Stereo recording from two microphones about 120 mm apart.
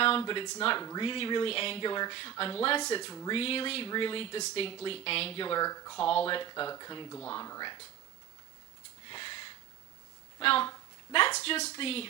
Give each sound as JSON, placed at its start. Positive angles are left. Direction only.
{"t": 0.0, "sound": "speech", "side_deg": 45}
{"t": 1.0, "sound": "speech", "side_deg": 45}
{"t": 5.5, "sound": "speech", "side_deg": 30}
{"t": 6.0, "sound": "speech", "side_deg": 50}
{"t": 6.5, "sound": "speech", "side_deg": 30}
{"t": 9.0, "sound": "a sound", "side_deg": 45}
{"t": 10.4, "sound": "speech", "side_deg": 50}
{"t": 11.3, "sound": "speech", "side_deg": 65}